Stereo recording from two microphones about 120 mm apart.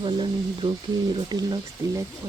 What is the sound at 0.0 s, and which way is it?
Speech, 40° right (ahead or behind).